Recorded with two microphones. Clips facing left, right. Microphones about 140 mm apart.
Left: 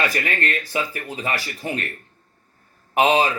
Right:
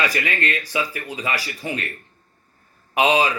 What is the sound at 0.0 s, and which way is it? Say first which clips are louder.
Speech: even; 50° left (ahead or behind).